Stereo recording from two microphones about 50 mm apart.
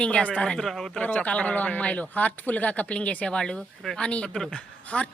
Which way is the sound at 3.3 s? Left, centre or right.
Centre.